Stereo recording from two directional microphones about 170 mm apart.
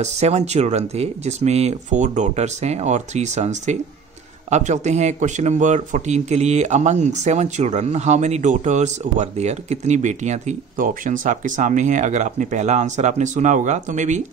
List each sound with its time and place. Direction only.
0.0 s speech: 40° right (ahead or behind)